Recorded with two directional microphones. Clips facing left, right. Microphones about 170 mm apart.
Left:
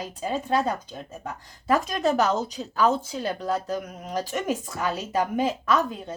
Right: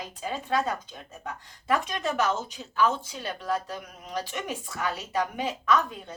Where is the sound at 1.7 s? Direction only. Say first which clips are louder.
Left 5 dB; 40° left (ahead or behind).